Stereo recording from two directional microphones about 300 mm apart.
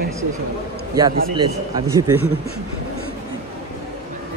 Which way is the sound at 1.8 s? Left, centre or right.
Centre.